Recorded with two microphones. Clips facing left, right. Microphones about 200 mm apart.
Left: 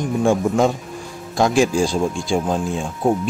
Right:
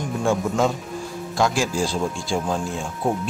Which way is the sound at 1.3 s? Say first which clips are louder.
Left 6 dB; 20° left (ahead or behind).